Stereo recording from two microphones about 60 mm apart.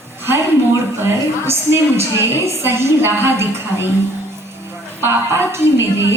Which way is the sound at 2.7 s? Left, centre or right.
Right.